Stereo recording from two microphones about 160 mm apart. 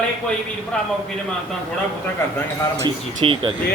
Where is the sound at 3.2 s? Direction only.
30° right (ahead or behind).